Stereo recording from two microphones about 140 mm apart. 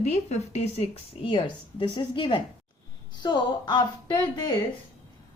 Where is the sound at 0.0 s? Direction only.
50° left (ahead or behind).